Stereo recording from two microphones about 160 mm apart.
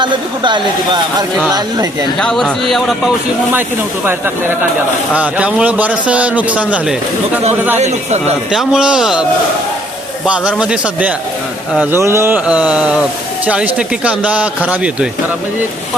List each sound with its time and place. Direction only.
0.0 s speech: 30° right (ahead or behind)
2.1 s a man's voice: centre (ahead or behind)
5.1 s a man's voice: 10° right (ahead or behind)
7.8 s a man's voice: 45° right (ahead or behind)
8.5 s a man's voice: 5° right (ahead or behind)
10.2 s a man's voice: 5° right (ahead or behind)